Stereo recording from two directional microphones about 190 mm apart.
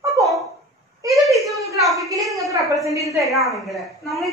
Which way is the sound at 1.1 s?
Centre (ahead or behind).